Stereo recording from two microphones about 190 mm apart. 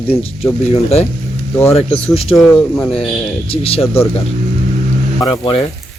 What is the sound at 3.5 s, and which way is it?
Speech, 30° left (ahead or behind).